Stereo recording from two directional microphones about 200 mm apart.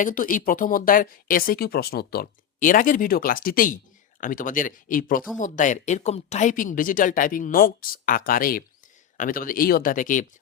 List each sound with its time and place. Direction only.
0.0 s speech: 45° left (ahead or behind)